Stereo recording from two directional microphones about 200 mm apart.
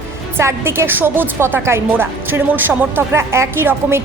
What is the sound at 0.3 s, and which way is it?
Speech, 15° right (ahead or behind).